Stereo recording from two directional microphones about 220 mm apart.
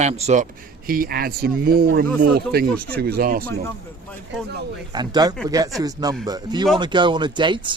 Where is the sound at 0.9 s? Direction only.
40° right (ahead or behind).